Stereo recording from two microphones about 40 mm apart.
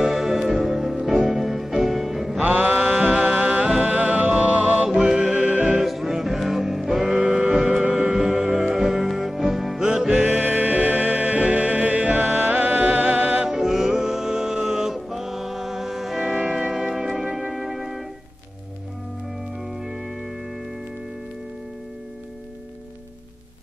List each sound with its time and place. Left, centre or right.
0.0 s music: centre
2.4 s music: right
5.8 s music: centre
7.0 s music: right
8.5 s music: centre
9.8 s music: right
10.1 s music: right
13.5 s music: centre
16.2 s music: right
16.9 s music: centre
17.5 s music: centre